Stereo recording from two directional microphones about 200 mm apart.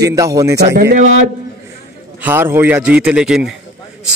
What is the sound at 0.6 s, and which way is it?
Speech, 55° right (ahead or behind).